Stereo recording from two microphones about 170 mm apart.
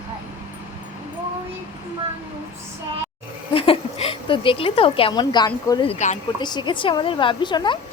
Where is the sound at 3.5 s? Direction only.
30° left (ahead or behind).